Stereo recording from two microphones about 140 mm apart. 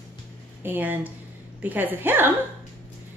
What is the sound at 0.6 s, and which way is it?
Speech, 15° right (ahead or behind).